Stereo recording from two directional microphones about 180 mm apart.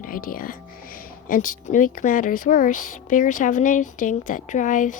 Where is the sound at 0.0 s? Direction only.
50° left (ahead or behind).